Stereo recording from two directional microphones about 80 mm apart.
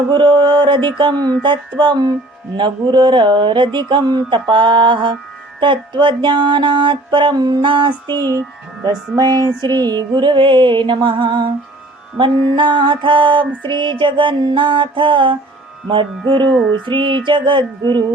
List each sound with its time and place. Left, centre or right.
0.1 s mantra: right
0.9 s speech: right
5.5 s mantra: right
8.0 s a sound: left
8.9 s music: right
12.1 s mantra: right
15.9 s music: right
17.2 s mantra: right